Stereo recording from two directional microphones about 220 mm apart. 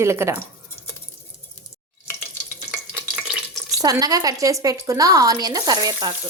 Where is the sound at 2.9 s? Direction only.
5° right (ahead or behind).